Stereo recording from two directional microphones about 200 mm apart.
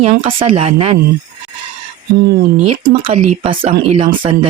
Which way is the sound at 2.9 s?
30° right (ahead or behind).